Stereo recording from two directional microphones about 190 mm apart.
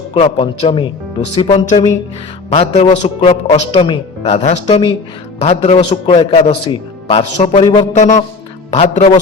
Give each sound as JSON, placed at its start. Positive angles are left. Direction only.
{"t": 0.1, "sound": "a man's voice", "side_deg": 30}
{"t": 7.9, "sound": "a man's voice", "side_deg": 40}